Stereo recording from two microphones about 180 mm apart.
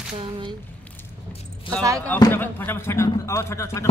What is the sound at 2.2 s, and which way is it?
Speech, 10° left (ahead or behind).